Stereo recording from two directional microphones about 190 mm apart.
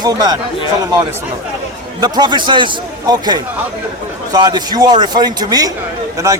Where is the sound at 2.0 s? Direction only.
20° right (ahead or behind).